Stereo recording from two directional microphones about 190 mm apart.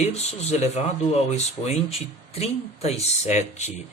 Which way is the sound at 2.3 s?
35° left (ahead or behind).